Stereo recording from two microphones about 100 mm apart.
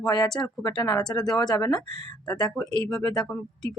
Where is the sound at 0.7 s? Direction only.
45° left (ahead or behind).